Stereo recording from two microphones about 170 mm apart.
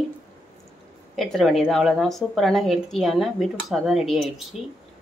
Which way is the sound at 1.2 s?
Centre (ahead or behind).